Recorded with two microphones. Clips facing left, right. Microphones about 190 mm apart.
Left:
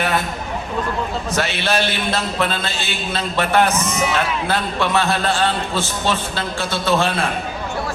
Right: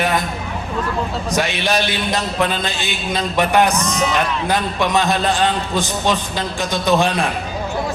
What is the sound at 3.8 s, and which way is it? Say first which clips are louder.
Speech: right 1 dB; 10° left (ahead or behind).